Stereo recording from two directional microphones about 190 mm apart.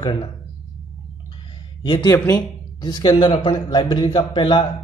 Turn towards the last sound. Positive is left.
turn(degrees=30)  # may be behind; listen again after turning